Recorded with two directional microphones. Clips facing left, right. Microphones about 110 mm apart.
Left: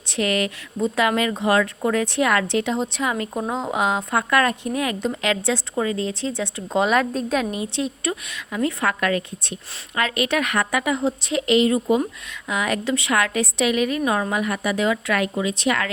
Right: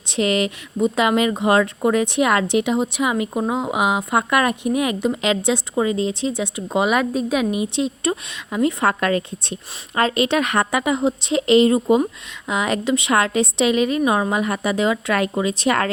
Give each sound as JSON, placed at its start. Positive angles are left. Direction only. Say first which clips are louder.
{"t": 0.1, "sound": "speech", "louder": "right 3 dB", "side_deg": -20}